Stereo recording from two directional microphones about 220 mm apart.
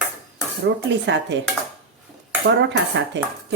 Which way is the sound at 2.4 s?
55° right (ahead or behind).